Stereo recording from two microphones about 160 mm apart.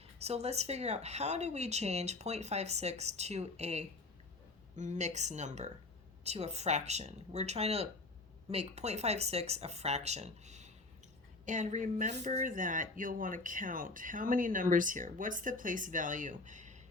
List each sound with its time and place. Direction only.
0.2 s speech: 40° right (ahead or behind)